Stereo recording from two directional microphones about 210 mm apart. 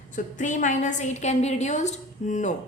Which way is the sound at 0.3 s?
35° left (ahead or behind).